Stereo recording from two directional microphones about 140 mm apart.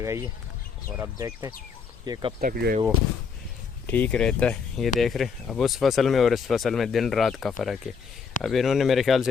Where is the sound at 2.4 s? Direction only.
90° right.